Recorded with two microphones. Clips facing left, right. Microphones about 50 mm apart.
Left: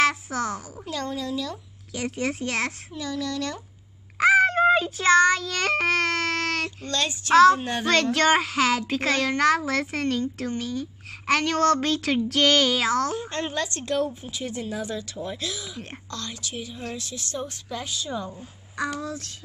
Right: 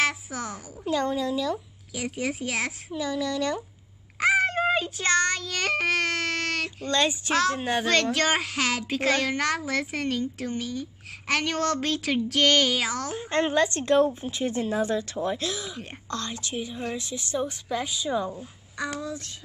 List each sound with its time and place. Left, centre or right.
0.0 s a sound: centre
0.8 s a child's voice: centre
4.2 s child singing: centre
6.9 s a child's voice: centre
7.3 s a child's voice: centre
13.3 s a woman's voice: right
18.8 s speech: centre